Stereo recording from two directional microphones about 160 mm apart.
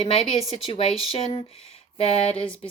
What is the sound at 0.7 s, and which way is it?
Speech, 35° left (ahead or behind).